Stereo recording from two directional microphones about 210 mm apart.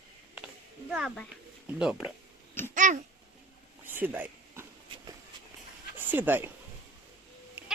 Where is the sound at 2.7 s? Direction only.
35° right (ahead or behind).